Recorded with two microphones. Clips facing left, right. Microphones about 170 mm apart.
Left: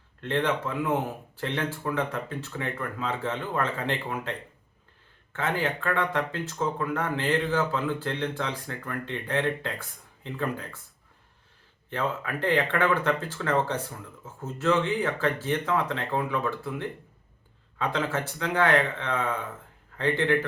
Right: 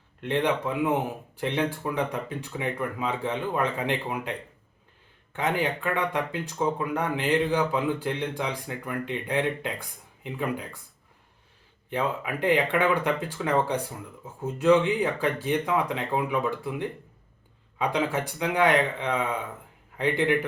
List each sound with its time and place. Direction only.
0.2 s speech: 15° right (ahead or behind)
11.9 s speech: 15° right (ahead or behind)